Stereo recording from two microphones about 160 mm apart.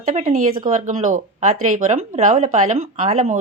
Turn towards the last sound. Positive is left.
turn(degrees=-50)  # may be behind; listen again after turning